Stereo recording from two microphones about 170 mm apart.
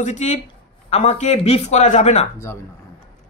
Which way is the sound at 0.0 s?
45° left (ahead or behind).